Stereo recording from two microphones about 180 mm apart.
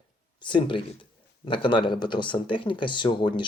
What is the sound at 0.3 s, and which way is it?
Speech, 25° left (ahead or behind).